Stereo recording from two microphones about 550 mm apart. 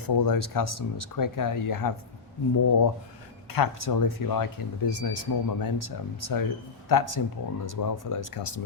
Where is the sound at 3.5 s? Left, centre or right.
Left.